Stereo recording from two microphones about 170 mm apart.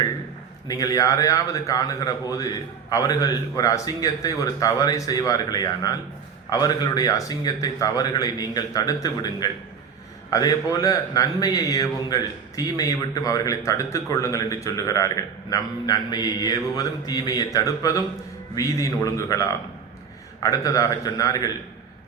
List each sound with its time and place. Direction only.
0.7 s a man's voice: 20° left (ahead or behind)